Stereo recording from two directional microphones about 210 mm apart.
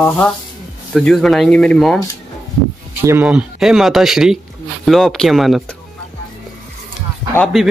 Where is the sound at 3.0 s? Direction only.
10° right (ahead or behind).